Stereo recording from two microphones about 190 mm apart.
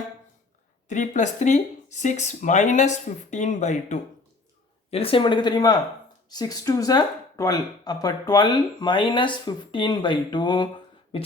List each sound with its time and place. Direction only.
0.9 s speech: 40° left (ahead or behind); by 10.7 s 25° left (ahead or behind)